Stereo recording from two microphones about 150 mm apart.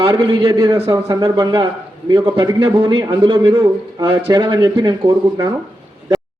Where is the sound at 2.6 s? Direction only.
35° right (ahead or behind).